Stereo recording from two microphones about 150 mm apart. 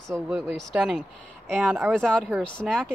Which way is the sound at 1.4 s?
5° left (ahead or behind).